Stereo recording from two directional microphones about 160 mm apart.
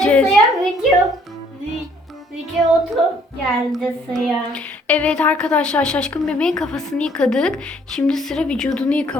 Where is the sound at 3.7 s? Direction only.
Centre (ahead or behind).